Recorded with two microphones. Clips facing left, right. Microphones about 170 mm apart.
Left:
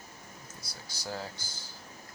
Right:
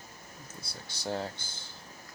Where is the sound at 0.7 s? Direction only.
25° right (ahead or behind).